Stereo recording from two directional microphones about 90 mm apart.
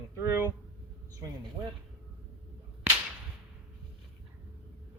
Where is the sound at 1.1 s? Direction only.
45° right (ahead or behind).